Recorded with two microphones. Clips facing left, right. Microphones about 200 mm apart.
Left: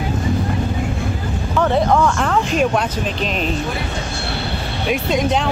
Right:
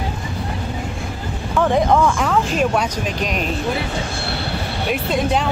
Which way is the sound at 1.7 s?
15° right (ahead or behind).